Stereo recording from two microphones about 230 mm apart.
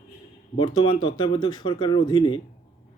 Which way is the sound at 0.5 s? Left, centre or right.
Left.